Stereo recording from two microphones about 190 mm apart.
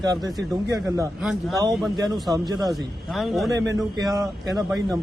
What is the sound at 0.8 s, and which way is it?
Speech, 10° right (ahead or behind).